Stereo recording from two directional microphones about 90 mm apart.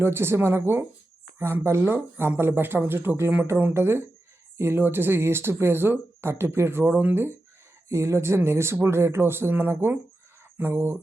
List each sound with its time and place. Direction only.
0.0 s speech: 25° right (ahead or behind)
6.8 s speech: 15° right (ahead or behind)